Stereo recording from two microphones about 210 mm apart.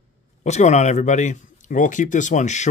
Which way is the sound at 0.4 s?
35° left (ahead or behind).